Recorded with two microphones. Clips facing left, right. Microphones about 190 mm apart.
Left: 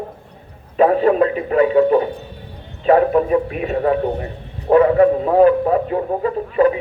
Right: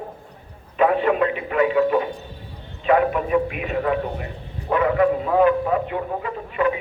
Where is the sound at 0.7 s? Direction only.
35° left (ahead or behind).